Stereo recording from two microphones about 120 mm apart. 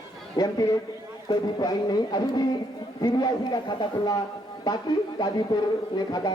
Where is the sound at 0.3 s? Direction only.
35° left (ahead or behind).